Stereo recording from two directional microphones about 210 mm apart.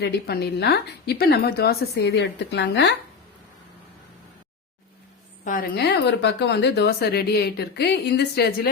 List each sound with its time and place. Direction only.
0.0 s speech: 50° left (ahead or behind)
5.5 s speech: 45° left (ahead or behind)